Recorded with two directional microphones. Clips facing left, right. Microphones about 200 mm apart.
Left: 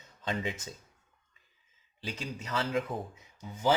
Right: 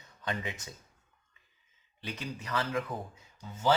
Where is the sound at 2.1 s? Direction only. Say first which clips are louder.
Even; 25° left (ahead or behind).